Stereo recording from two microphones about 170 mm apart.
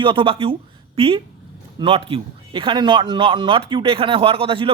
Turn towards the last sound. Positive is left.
turn(degrees=-30)  # may be behind; listen again after turning